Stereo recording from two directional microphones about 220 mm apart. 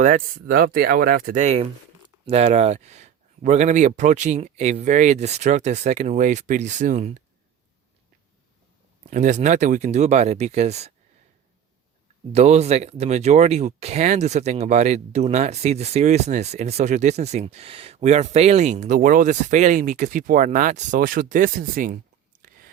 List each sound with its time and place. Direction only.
0.0 s speech: 40° right (ahead or behind)
9.0 s speech: 35° right (ahead or behind)
12.3 s speech: 30° right (ahead or behind)